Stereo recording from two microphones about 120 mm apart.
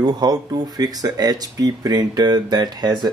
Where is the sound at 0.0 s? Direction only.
35° right (ahead or behind).